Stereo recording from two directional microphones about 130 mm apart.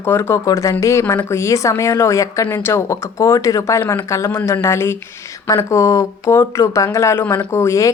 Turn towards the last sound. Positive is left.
turn(degrees=25)  # may be behind; listen again after turning